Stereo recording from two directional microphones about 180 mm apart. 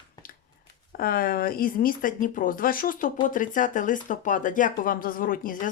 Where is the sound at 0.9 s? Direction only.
55° left (ahead or behind).